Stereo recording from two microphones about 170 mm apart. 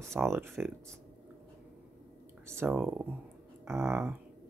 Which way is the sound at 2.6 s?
10° right (ahead or behind).